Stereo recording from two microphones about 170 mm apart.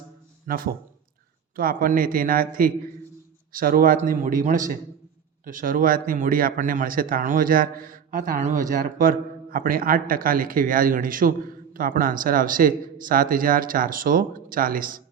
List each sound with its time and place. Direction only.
0.4 s speech: 55° right (ahead or behind)
3.5 s speech: 55° right (ahead or behind)